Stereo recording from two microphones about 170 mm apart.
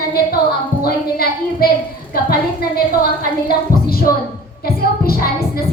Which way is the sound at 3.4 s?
60° left (ahead or behind).